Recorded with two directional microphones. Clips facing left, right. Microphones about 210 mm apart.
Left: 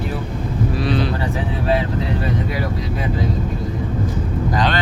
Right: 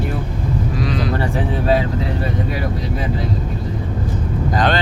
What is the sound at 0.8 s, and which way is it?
Speech, 30° left (ahead or behind).